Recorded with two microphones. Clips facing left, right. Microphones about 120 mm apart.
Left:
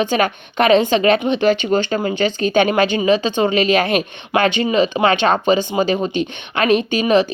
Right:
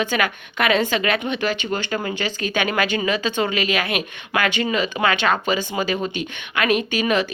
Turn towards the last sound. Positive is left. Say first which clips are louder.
# left 6 dB
turn(degrees=25)  # may be behind; listen again after turning